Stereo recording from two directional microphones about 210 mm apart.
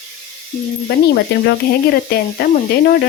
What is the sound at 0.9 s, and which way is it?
Speech, 50° left (ahead or behind).